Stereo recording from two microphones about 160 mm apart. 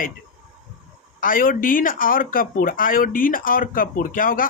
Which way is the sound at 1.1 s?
60° left (ahead or behind).